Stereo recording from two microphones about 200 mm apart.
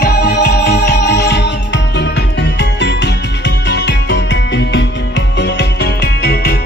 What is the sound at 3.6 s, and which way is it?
Music, 60° left (ahead or behind).